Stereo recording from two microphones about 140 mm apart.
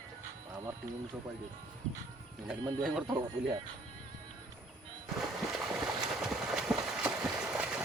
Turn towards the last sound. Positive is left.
turn(degrees=-5)  # may be behind; listen again after turning